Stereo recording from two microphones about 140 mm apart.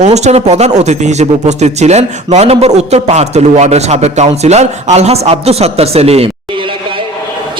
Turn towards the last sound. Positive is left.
turn(degrees=-45)  # may be behind; listen again after turning